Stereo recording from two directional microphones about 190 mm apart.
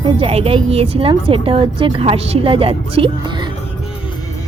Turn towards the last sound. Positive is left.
turn(degrees=-25)  # may be behind; listen again after turning